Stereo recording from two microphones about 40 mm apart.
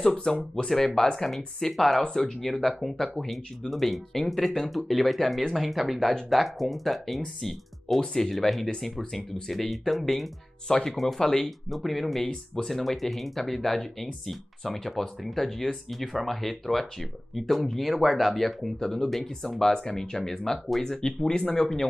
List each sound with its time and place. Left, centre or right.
0.3 s speech: centre
2.0 s speech: centre
2.4 s speech: centre
8.0 s speech: centre
10.7 s speech: centre
11.0 s speech: centre
18.8 s speech: centre